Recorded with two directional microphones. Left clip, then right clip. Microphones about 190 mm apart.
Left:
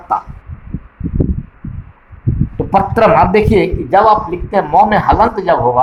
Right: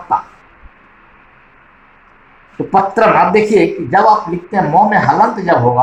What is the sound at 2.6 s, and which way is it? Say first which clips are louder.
Speech: even; 55° left (ahead or behind).